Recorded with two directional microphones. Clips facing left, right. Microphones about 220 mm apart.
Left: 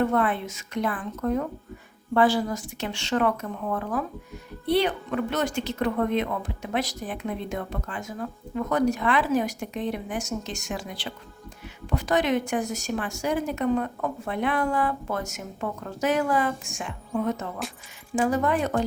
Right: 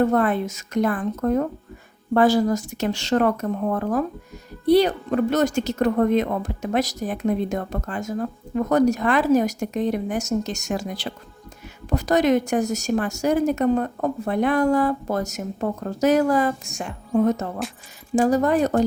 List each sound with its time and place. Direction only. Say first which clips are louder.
0.0 s a woman's voice: right 4 dB; 40° right (ahead or behind)